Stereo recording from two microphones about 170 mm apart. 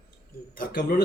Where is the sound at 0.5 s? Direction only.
60° left (ahead or behind).